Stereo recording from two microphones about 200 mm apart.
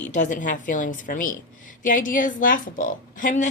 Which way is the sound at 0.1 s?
40° left (ahead or behind).